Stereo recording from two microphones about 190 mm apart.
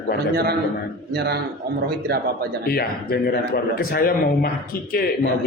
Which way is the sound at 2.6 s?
55° left (ahead or behind).